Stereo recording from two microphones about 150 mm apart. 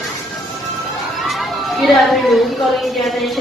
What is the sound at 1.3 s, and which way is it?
Children playing, centre (ahead or behind).